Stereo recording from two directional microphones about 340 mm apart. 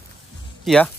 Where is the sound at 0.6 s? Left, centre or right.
Centre.